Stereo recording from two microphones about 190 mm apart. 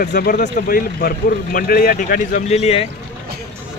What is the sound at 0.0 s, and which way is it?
Speech, 50° left (ahead or behind).